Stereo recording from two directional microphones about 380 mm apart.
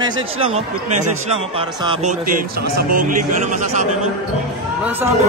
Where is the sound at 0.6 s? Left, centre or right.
Centre.